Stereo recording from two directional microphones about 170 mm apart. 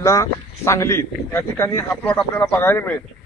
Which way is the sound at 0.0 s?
15° left (ahead or behind).